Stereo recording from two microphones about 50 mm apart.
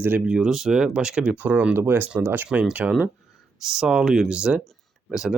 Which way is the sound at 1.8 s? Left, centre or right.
Right.